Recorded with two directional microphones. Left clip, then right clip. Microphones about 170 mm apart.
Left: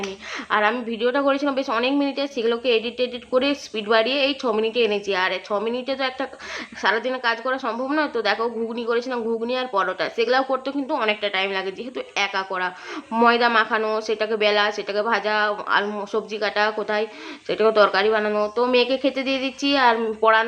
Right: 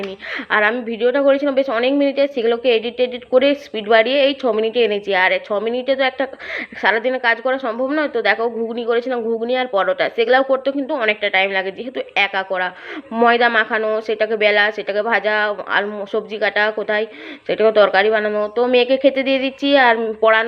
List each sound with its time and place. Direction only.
0.3 s a woman's voice: 15° right (ahead or behind)
0.7 s a woman's voice: 5° right (ahead or behind)